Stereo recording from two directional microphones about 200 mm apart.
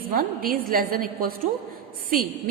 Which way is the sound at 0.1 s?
45° right (ahead or behind).